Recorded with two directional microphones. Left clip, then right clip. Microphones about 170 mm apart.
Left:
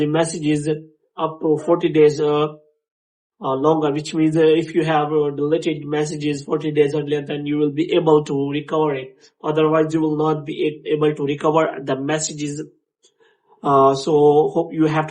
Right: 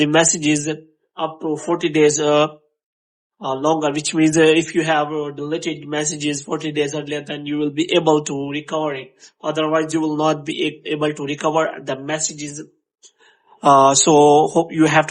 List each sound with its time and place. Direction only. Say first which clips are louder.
0.0 s a man's voice: right 4 dB; 40° right (ahead or behind)
3.4 s a man's voice: left 1 dB; 25° right (ahead or behind); by 12.5 s 5° right (ahead or behind)
13.7 s mantra: right 3 dB; 50° right (ahead or behind)